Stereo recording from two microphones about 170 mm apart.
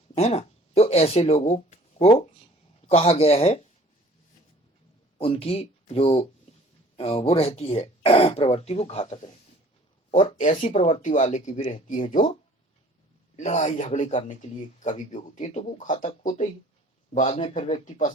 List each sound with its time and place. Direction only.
0.1 s a sound: 35° left (ahead or behind)
2.9 s speech: 35° left (ahead or behind)
5.1 s speech: 35° left (ahead or behind)
13.3 s speech: 45° left (ahead or behind)